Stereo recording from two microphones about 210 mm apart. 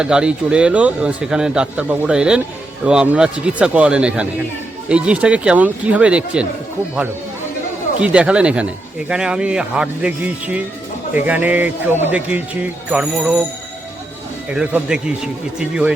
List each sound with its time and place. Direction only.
0.0 s speech: 5° right (ahead or behind)
7.9 s speech: 5° right (ahead or behind)
14.5 s speech: 5° right (ahead or behind)